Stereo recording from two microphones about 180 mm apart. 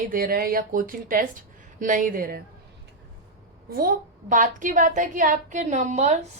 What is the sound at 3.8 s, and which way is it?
A woman's voice, 50° right (ahead or behind).